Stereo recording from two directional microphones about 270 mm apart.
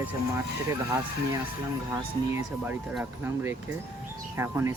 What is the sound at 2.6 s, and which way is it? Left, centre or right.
Speech, centre.